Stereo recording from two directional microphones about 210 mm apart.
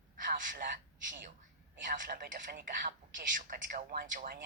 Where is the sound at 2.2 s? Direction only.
45° right (ahead or behind).